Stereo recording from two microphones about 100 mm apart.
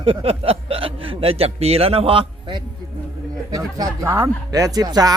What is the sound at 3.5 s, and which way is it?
Speech, 40° right (ahead or behind).